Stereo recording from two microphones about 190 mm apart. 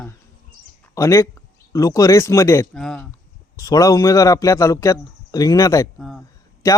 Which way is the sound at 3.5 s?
20° left (ahead or behind).